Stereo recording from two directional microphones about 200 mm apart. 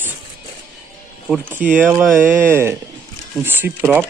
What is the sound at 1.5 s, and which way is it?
Speech, 10° right (ahead or behind).